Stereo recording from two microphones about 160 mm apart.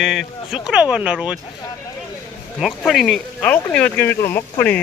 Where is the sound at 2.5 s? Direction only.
Centre (ahead or behind).